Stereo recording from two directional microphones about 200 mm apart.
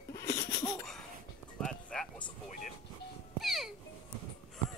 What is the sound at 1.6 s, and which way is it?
Music, 5° left (ahead or behind).